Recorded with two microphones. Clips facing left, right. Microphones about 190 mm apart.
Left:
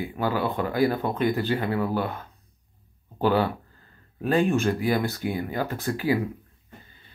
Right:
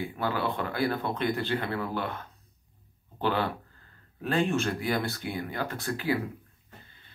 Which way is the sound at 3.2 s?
15° left (ahead or behind).